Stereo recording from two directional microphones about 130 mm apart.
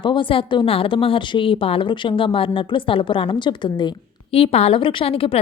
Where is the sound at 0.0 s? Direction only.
40° left (ahead or behind).